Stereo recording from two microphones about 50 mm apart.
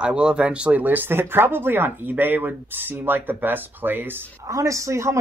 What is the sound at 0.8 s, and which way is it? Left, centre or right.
Speech, right.